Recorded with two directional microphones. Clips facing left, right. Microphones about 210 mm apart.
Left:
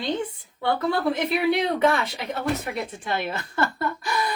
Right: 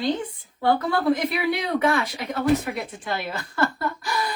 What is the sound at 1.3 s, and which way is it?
Speech, 25° left (ahead or behind).